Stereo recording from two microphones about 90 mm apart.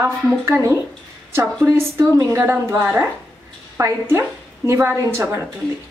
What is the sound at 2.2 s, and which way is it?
A woman's voice, 30° right (ahead or behind).